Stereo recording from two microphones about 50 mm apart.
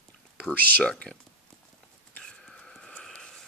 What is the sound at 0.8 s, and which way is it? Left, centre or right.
Speech, centre.